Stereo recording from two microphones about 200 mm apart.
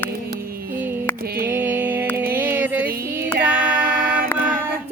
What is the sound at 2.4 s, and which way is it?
Child singing, 10° right (ahead or behind).